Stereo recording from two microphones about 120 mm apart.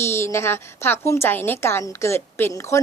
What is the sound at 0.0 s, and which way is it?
A woman's voice, 20° left (ahead or behind).